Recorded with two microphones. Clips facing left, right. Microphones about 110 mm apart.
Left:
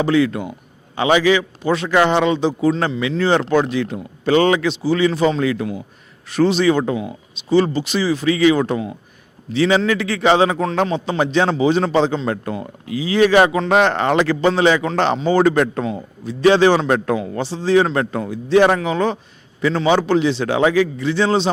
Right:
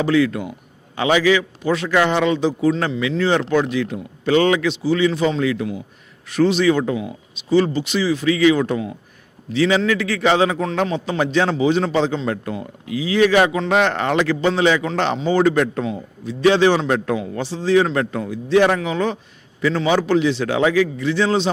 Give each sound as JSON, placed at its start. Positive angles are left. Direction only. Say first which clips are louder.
{"t": 0.0, "sound": "a man's voice", "louder": "left 1 dB", "side_deg": 25}
{"t": 17.4, "sound": "a man's voice", "louder": "left 1 dB", "side_deg": 30}